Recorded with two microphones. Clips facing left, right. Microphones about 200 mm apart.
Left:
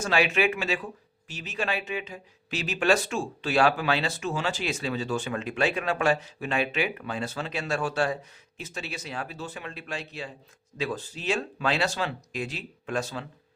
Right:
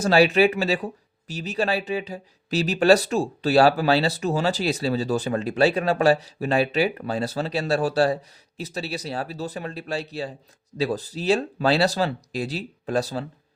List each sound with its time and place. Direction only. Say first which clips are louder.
0.0 s speech: right 7 dB; 35° right (ahead or behind)